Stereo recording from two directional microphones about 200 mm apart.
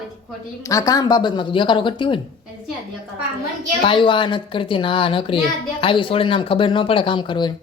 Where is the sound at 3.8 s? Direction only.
25° left (ahead or behind).